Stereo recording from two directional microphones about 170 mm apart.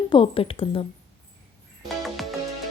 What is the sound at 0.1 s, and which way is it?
Speech, 30° left (ahead or behind).